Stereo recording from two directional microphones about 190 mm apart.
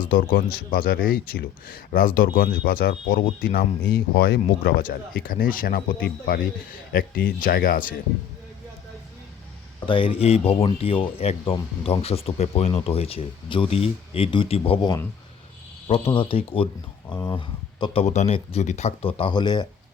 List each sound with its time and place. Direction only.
0.1 s speech: 50° left (ahead or behind)
9.8 s speech: 25° left (ahead or behind)